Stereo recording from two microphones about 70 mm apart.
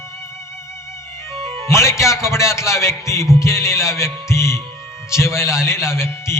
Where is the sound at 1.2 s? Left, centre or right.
Left.